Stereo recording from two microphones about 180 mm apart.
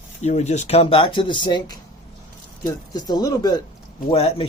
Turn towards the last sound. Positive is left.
turn(degrees=35)  # may be behind; listen again after turning